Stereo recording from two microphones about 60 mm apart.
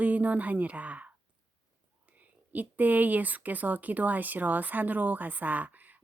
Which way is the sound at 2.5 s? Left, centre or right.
Right.